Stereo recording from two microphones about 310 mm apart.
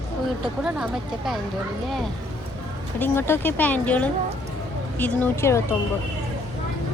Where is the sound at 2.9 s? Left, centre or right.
Centre.